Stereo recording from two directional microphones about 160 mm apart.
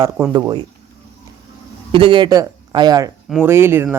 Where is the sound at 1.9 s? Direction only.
30° right (ahead or behind).